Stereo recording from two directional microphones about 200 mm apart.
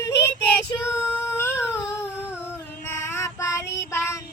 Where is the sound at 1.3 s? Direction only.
10° left (ahead or behind).